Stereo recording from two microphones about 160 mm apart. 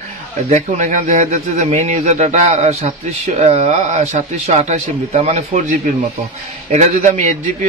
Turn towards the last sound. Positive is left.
turn(degrees=-50)  # may be behind; listen again after turning